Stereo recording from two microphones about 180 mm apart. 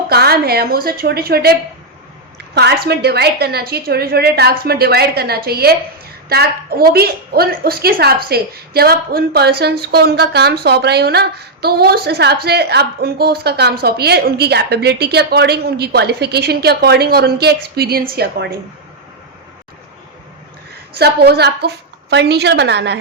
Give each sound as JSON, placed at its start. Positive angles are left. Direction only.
{"t": 0.1, "sound": "a woman's voice", "side_deg": -60}
{"t": 2.6, "sound": "a woman's voice", "side_deg": -65}
{"t": 21.0, "sound": "a woman's voice", "side_deg": -65}